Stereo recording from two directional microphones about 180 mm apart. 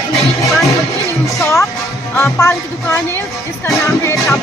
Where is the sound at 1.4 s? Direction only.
15° left (ahead or behind).